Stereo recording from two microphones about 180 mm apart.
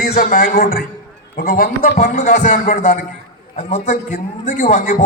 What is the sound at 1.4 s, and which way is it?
A man's voice, 60° left (ahead or behind).